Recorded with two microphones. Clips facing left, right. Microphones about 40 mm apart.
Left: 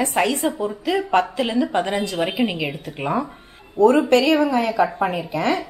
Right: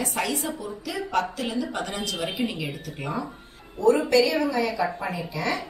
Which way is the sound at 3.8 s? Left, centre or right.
Left.